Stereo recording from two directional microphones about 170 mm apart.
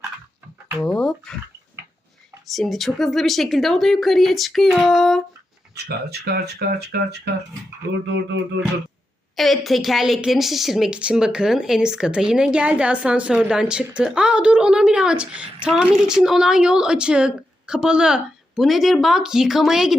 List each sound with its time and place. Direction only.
0.8 s a woman's voice: 5° left (ahead or behind)
2.5 s a woman's voice: centre (ahead or behind)
5.7 s speech: 70° right (ahead or behind)
8.0 s a sound: 90° right
9.3 s a woman's voice: centre (ahead or behind)